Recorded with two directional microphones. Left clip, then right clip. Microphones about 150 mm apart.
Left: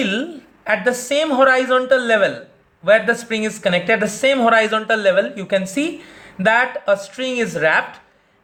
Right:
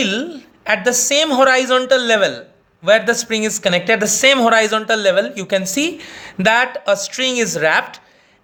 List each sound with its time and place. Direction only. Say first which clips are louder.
0.0 s speech: right 2 dB; 50° right (ahead or behind)
2.0 s speech: right 1 dB; 45° right (ahead or behind)